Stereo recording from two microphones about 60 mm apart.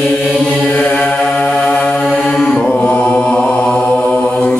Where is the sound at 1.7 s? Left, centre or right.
Centre.